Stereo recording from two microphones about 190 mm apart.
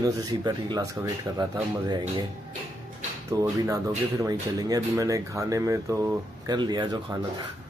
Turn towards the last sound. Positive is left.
turn(degrees=-20)  # may be behind; listen again after turning